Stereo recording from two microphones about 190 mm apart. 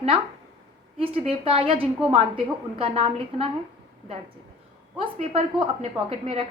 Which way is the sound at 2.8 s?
30° right (ahead or behind).